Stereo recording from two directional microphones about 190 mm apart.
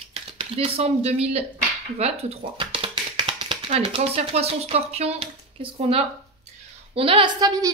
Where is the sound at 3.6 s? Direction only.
30° right (ahead or behind).